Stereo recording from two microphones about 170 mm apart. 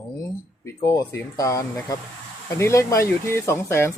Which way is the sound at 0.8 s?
15° left (ahead or behind).